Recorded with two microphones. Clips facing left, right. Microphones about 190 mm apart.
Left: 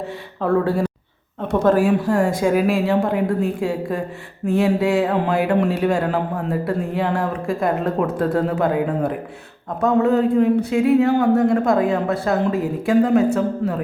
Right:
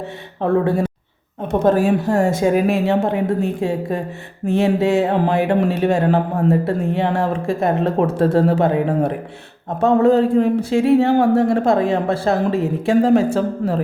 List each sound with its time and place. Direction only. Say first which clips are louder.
0.4 s a woman's voice: right 2 dB; 25° right (ahead or behind)
9.8 s a sound: right 3 dB; 30° right (ahead or behind)
10.7 s a woman's voice: right 1 dB; 25° right (ahead or behind)